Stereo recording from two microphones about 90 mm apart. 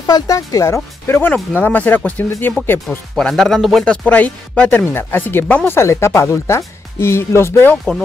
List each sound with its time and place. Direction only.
0.0 s speech: 40° left (ahead or behind); by 3.0 s 25° left (ahead or behind)
3.2 s speech: 5° left (ahead or behind)
3.8 s speech: 10° left (ahead or behind); by 7.7 s 30° left (ahead or behind)
7.7 s speech: 5° left (ahead or behind)